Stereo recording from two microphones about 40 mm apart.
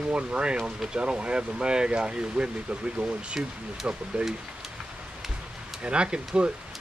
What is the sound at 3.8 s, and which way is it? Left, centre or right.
Speech, right.